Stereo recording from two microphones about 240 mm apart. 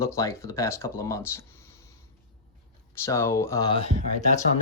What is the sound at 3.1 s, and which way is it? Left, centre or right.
Speech, centre.